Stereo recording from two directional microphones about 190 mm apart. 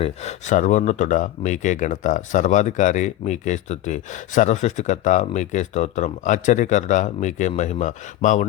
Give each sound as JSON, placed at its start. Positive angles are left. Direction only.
{"t": 0.0, "sound": "speech", "side_deg": 35}